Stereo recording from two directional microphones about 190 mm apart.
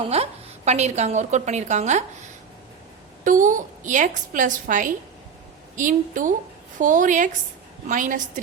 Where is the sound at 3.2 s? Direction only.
40° right (ahead or behind).